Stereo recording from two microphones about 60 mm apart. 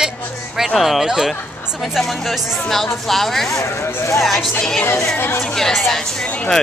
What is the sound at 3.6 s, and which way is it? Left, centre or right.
Speech, left.